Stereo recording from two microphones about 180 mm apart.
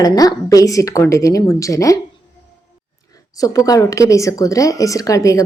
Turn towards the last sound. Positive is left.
turn(degrees=20)  # may be behind; listen again after turning